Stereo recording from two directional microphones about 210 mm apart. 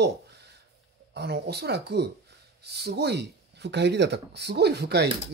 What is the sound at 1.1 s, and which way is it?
Speech, 50° right (ahead or behind).